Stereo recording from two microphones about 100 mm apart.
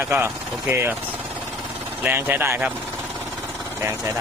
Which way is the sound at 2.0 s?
20° right (ahead or behind).